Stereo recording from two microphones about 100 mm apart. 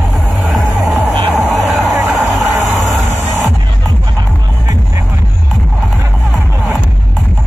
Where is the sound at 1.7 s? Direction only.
25° right (ahead or behind).